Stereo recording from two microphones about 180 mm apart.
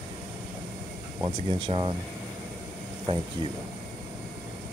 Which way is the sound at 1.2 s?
30° right (ahead or behind).